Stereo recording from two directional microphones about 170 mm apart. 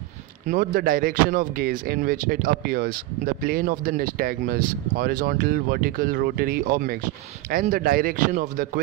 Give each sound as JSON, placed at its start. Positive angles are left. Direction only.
{"t": 0.5, "sound": "speech", "side_deg": -60}